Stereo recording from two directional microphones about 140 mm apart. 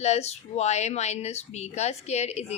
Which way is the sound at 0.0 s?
50° left (ahead or behind).